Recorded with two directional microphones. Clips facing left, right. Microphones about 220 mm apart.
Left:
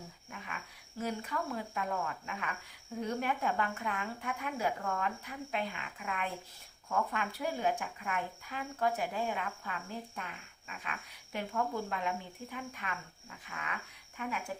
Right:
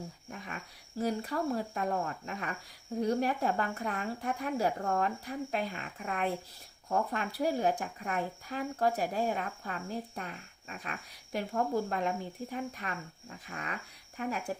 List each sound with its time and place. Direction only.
0.3 s speech: 40° right (ahead or behind)